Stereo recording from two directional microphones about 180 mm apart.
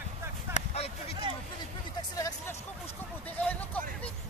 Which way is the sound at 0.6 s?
35° left (ahead or behind).